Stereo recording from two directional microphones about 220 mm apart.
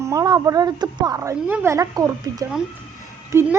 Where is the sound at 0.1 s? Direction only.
15° right (ahead or behind).